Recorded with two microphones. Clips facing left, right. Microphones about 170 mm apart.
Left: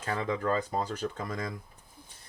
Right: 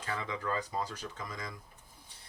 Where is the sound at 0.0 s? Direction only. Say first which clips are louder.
Left 6 dB; 45° left (ahead or behind).